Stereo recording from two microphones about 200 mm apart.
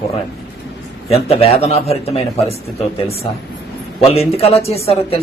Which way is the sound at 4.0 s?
30° left (ahead or behind).